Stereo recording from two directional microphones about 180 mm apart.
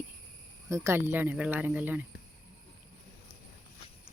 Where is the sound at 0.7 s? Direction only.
15° right (ahead or behind).